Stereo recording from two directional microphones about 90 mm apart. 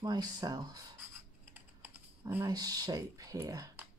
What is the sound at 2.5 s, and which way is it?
Speech, 45° right (ahead or behind).